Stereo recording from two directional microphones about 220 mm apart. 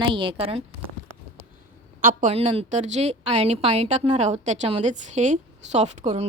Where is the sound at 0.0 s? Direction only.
25° right (ahead or behind).